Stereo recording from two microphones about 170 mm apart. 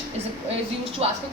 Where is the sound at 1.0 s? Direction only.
35° right (ahead or behind).